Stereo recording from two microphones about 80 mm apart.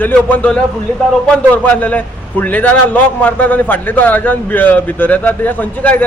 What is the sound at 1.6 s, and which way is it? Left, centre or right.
A man's voice, centre.